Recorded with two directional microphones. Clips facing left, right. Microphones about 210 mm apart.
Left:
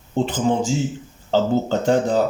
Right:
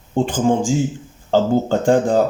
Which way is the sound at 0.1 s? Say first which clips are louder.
Right 3 dB; 45° right (ahead or behind).